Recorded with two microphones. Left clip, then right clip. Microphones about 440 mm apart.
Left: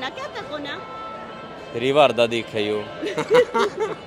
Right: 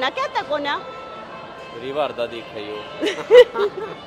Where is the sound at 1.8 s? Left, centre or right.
Left.